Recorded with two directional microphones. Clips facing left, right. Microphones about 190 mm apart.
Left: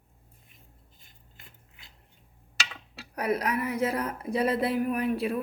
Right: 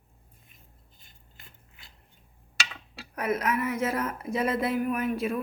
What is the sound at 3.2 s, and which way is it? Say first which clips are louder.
Speech: even; 35° left (ahead or behind).